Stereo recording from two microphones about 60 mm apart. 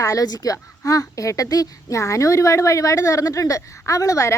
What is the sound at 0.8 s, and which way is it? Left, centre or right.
Speech, left.